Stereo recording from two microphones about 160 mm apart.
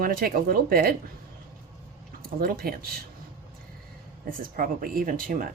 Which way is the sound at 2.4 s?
65° right (ahead or behind).